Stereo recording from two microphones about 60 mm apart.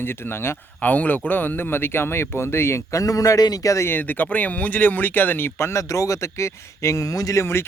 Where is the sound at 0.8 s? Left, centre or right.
Left.